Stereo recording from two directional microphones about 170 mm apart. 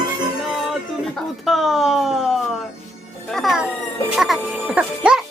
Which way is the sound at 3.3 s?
Centre (ahead or behind).